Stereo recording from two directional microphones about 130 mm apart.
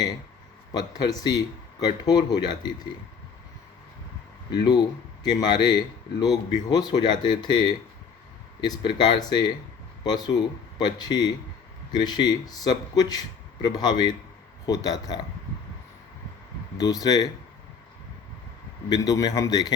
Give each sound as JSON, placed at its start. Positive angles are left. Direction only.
{"t": 0.7, "sound": "speech", "side_deg": 30}
{"t": 4.5, "sound": "a man's voice", "side_deg": 35}
{"t": 16.8, "sound": "a man's voice", "side_deg": 30}
{"t": 18.9, "sound": "a man's voice", "side_deg": 30}